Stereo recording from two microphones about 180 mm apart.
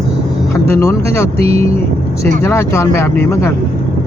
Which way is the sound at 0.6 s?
15° left (ahead or behind).